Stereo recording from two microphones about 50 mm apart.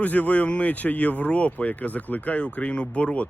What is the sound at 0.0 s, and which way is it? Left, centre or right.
Speech, left.